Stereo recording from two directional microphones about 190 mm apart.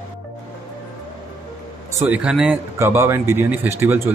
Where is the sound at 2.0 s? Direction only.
5° right (ahead or behind).